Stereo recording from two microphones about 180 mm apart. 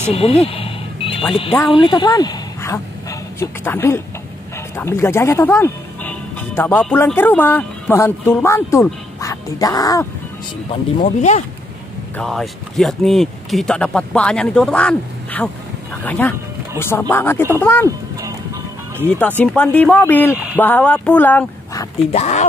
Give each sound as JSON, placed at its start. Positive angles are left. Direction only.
{"t": 0.0, "sound": "a sound", "side_deg": 35}
{"t": 1.3, "sound": "speech", "side_deg": 30}
{"t": 10.7, "sound": "speech", "side_deg": 40}
{"t": 12.2, "sound": "speech", "side_deg": 0}
{"t": 19.0, "sound": "speech", "side_deg": 10}
{"t": 22.1, "sound": "speech", "side_deg": 40}